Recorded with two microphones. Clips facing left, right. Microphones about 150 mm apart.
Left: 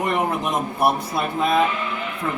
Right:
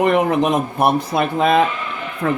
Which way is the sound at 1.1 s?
70° right (ahead or behind).